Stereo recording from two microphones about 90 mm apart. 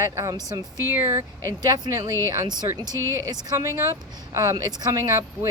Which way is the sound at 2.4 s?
50° right (ahead or behind).